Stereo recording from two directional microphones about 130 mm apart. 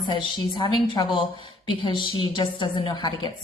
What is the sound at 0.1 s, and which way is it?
A woman's voice, 35° left (ahead or behind).